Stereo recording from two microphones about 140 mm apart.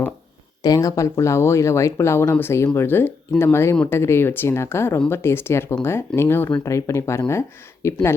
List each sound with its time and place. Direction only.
0.6 s a woman's voice: 25° left (ahead or behind)